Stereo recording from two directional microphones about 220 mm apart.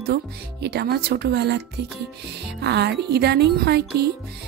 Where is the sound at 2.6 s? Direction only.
50° right (ahead or behind).